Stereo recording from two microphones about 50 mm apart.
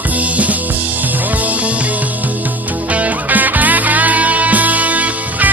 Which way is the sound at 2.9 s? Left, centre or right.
Right.